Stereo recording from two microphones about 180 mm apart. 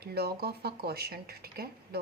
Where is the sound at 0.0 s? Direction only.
60° right (ahead or behind).